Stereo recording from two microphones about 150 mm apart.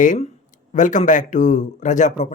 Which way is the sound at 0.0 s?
60° left (ahead or behind).